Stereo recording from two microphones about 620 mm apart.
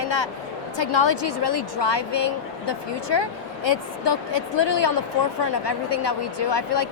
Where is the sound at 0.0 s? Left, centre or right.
Left.